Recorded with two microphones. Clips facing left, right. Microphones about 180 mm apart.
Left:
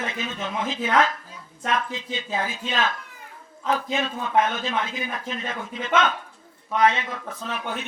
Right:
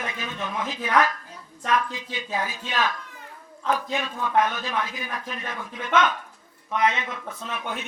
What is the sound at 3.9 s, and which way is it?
Speech, 25° left (ahead or behind).